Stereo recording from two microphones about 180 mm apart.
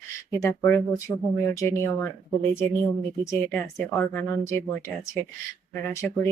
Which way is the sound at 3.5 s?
5° left (ahead or behind).